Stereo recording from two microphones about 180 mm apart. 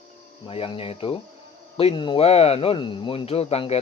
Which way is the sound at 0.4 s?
30° left (ahead or behind).